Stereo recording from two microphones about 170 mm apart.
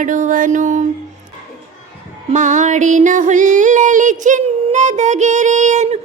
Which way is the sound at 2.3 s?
45° right (ahead or behind).